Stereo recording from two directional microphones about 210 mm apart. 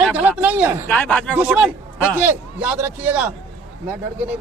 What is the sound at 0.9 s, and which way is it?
Speech, 5° left (ahead or behind).